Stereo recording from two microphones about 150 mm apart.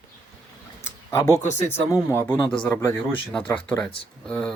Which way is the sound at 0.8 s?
15° left (ahead or behind).